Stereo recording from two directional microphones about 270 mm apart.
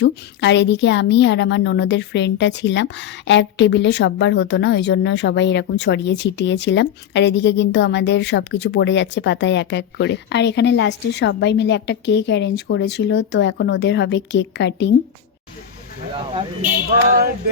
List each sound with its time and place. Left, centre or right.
0.0 s a woman's voice: left